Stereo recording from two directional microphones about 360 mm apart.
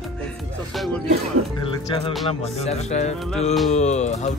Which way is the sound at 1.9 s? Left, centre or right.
Centre.